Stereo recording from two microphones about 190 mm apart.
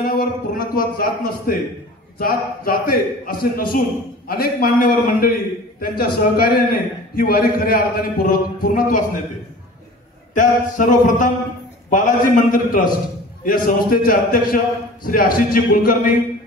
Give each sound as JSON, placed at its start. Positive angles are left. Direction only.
{"t": 0.0, "sound": "a man's voice", "side_deg": 50}
{"t": 10.3, "sound": "a man's voice", "side_deg": 45}